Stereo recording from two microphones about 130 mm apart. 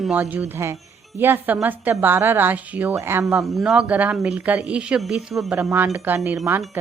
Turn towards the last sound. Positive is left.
turn(degrees=-20)  # may be behind; listen again after turning